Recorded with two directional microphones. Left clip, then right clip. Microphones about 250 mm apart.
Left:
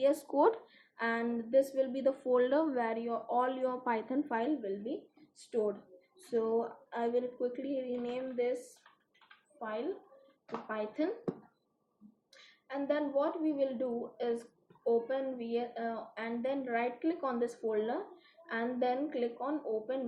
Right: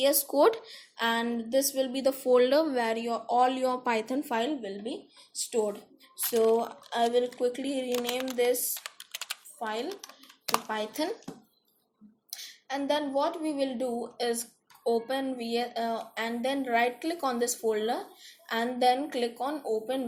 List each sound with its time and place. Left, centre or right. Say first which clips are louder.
0.0 s speech: right 5 dB; right
6.3 s speech: right 7 dB; right
9.6 s speech: right 4 dB; right
12.6 s speech: right 4 dB; right